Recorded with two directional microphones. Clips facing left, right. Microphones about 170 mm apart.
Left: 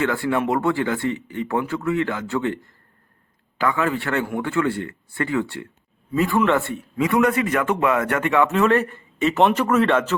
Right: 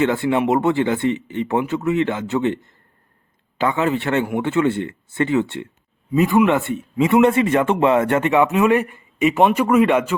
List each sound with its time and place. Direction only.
0.0 s speech: 20° right (ahead or behind)